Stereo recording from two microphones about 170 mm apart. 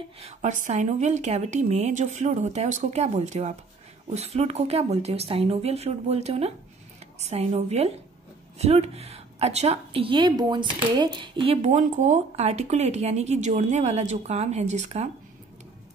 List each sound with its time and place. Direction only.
0.2 s a woman's voice: 45° right (ahead or behind)